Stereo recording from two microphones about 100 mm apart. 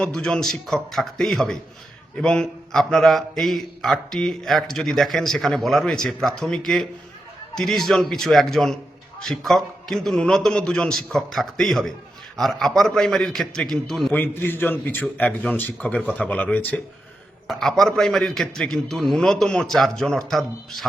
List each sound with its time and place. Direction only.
0.0 s speech: 10° left (ahead or behind)
14.1 s a man's voice: 20° left (ahead or behind)
16.0 s speech: 5° left (ahead or behind)
17.5 s speech: 5° left (ahead or behind)